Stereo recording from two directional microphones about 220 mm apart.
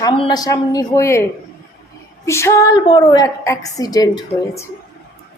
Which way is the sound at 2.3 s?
15° left (ahead or behind).